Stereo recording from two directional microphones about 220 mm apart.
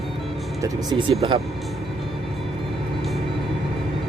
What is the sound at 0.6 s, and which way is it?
Speech, 20° right (ahead or behind).